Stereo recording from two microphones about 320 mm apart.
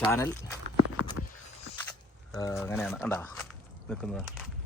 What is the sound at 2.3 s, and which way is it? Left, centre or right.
A man's voice, centre.